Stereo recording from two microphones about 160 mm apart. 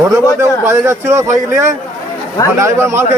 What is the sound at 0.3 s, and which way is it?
A man's voice, 15° right (ahead or behind).